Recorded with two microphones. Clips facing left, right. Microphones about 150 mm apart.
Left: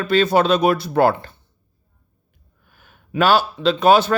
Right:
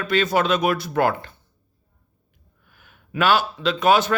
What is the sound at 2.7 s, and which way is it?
Speech, 40° left (ahead or behind).